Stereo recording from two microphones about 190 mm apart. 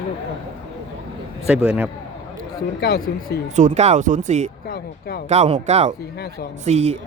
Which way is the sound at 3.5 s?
40° right (ahead or behind).